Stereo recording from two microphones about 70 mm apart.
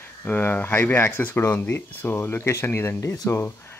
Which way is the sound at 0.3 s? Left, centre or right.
Left.